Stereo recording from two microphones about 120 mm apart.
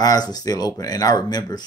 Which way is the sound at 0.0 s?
35° left (ahead or behind).